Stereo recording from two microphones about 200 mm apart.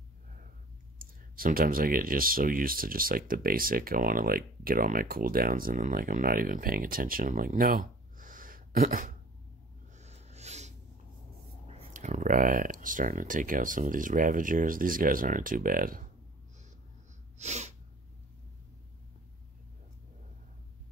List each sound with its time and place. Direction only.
1.3 s speech: 45° right (ahead or behind)
9.9 s a sound: 35° right (ahead or behind)
11.6 s speech: 35° right (ahead or behind)
17.4 s sneeze: 35° right (ahead or behind)